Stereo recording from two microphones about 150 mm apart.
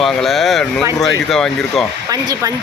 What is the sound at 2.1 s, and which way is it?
Speech, 25° right (ahead or behind).